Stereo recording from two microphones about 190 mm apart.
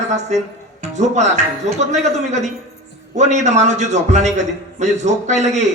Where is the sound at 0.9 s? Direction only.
35° right (ahead or behind).